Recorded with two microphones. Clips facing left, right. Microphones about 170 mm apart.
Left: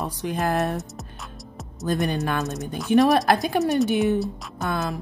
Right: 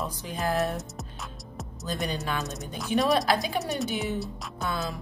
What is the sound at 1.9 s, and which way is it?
Speech, 55° left (ahead or behind).